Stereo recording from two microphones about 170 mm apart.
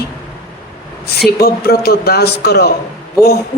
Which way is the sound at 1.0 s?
70° left (ahead or behind).